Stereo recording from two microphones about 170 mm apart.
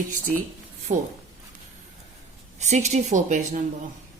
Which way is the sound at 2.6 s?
45° right (ahead or behind).